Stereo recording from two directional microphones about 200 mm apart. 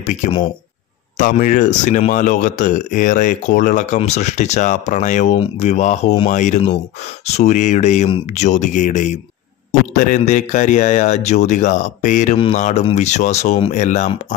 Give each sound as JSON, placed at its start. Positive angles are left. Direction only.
{"t": 0.0, "sound": "speech", "side_deg": 35}